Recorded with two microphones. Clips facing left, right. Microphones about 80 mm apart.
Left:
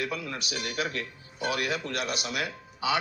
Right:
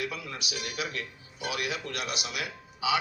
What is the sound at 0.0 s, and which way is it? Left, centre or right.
Speech, left.